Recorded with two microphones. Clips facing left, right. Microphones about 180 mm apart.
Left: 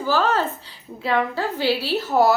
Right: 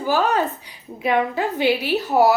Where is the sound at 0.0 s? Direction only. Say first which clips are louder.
Right 1 dB; 15° right (ahead or behind).